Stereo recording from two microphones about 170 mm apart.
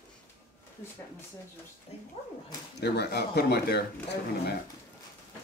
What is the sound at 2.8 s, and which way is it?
Speech, 70° left (ahead or behind).